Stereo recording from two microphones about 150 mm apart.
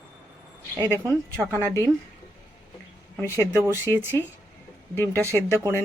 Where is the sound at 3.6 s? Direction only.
15° right (ahead or behind).